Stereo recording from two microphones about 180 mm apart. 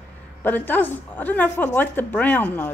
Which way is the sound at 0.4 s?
10° left (ahead or behind).